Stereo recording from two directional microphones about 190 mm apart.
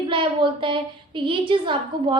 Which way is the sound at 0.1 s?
25° right (ahead or behind).